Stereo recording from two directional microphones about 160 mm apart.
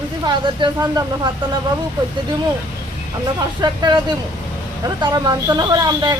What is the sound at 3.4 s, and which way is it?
Speech, 25° right (ahead or behind).